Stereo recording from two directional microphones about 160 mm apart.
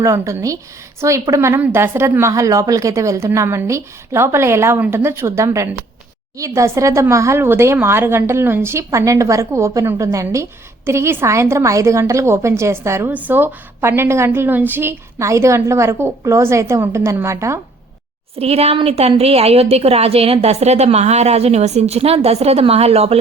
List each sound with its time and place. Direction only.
0.0 s a woman's voice: 20° right (ahead or behind)
18.3 s a woman's voice: 40° right (ahead or behind)